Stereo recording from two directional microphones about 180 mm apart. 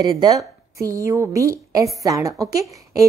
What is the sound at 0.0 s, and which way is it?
A woman's voice, 20° right (ahead or behind).